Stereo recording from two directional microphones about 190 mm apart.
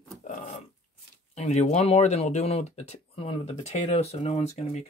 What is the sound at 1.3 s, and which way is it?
Speech, 35° left (ahead or behind).